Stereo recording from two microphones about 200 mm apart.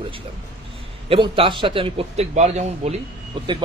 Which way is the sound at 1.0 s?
25° right (ahead or behind).